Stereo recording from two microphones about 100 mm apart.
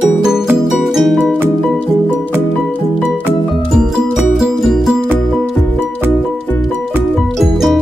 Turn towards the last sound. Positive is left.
turn(degrees=0)  # may be behind; listen again after turning